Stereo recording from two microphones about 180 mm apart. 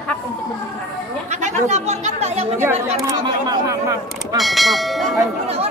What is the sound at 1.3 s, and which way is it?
Speech, 40° right (ahead or behind).